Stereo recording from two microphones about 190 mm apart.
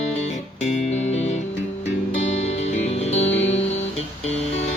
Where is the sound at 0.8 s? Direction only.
35° left (ahead or behind).